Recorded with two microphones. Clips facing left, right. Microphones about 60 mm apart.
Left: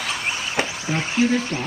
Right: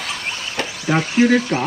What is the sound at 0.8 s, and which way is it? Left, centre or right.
Speech, right.